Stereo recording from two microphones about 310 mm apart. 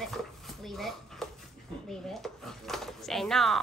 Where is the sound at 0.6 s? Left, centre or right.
Centre.